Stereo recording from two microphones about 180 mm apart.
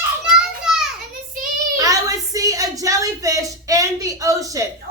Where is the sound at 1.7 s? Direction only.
20° right (ahead or behind).